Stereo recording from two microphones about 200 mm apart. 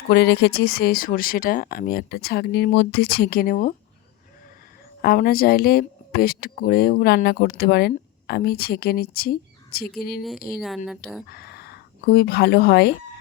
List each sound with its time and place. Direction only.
0.1 s speech: 55° left (ahead or behind)
5.0 s speech: 50° left (ahead or behind)
10.2 s speech: centre (ahead or behind)
11.3 s speech: 50° left (ahead or behind)